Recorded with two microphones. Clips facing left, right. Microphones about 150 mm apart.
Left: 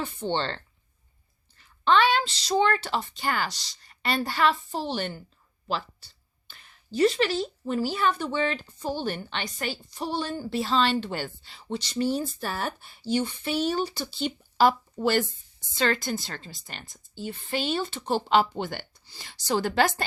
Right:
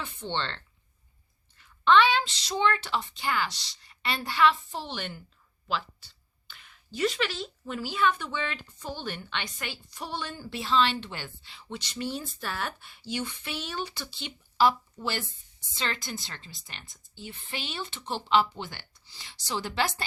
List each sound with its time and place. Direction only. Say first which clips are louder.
0.0 s speech: left 5 dB; 40° left (ahead or behind)
1.8 s speech: even; 40° left (ahead or behind)
6.5 s a woman's voice: left 7 dB; 35° left (ahead or behind)